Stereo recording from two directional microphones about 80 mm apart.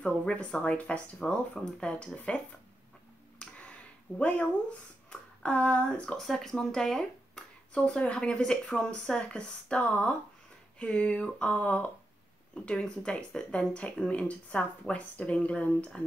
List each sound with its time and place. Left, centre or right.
0.2 s speech: centre
3.3 s a sound: centre
4.2 s speech: centre